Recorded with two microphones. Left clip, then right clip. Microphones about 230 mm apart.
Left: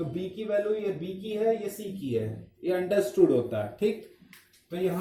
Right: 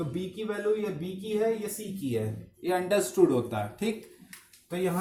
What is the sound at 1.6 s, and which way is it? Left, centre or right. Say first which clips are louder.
Speech: left 1 dB; centre.